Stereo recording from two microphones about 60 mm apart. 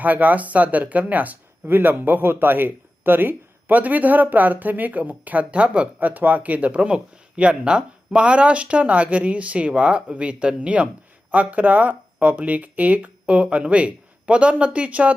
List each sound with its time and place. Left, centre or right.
0.0 s speech: right
6.0 s speech: right